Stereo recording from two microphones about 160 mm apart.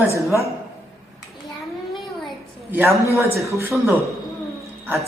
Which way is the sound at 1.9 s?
Centre (ahead or behind).